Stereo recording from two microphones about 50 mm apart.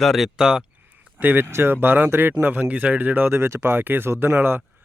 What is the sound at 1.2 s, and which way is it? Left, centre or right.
Speech, right.